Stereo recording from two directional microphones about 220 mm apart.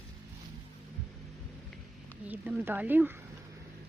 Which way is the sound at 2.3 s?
10° right (ahead or behind).